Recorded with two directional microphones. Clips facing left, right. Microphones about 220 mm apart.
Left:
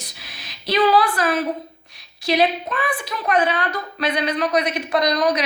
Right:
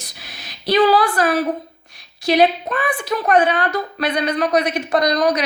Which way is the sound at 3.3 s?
45° right (ahead or behind).